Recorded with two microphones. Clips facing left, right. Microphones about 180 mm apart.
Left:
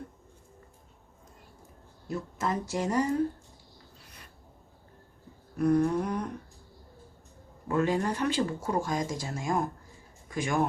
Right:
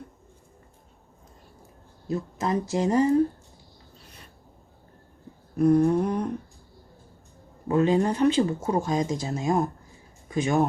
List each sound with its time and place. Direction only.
2.0 s speech: 20° right (ahead or behind)
5.5 s speech: 25° right (ahead or behind)
7.7 s speech: 20° right (ahead or behind)